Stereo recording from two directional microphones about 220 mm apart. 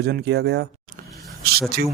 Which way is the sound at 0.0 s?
50° right (ahead or behind).